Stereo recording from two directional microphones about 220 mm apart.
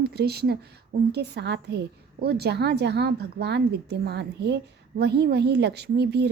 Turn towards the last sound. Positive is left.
turn(degrees=-50)  # may be behind; listen again after turning